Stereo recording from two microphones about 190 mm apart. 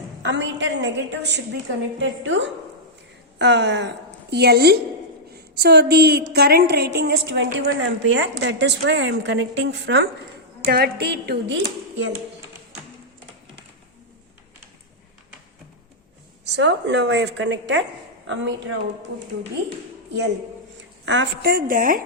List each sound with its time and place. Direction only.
0.3 s a woman's voice: 70° right (ahead or behind)
2.0 s a woman's voice: 80° right
3.3 s a woman's voice: 65° right (ahead or behind)
7.8 s a woman's voice: 80° right
10.7 s a woman's voice: 50° right (ahead or behind); by 12.1 s 70° right (ahead or behind)
16.5 s a woman's voice: 70° right (ahead or behind)
21.0 s a woman's voice: 75° right (ahead or behind); by 22.0 s 45° right (ahead or behind)